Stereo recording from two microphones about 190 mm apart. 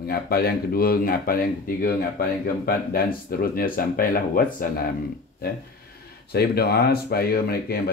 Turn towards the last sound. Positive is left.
turn(degrees=55)  # may be behind; listen again after turning